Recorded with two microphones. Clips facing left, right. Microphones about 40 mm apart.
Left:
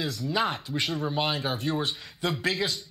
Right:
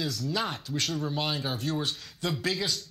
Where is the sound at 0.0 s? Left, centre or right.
Centre.